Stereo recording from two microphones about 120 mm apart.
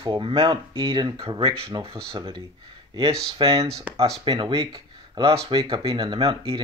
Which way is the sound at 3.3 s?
50° right (ahead or behind).